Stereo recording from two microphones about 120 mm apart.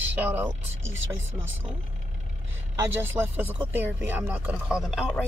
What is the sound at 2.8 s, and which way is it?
Speech, 20° right (ahead or behind).